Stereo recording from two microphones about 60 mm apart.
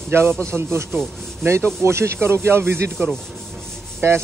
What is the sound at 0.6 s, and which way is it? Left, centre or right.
Speech, right.